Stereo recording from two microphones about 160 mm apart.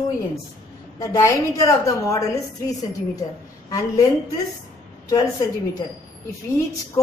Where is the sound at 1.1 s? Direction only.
20° left (ahead or behind).